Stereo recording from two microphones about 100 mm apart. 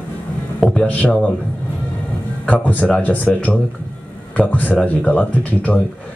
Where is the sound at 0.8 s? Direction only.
15° left (ahead or behind).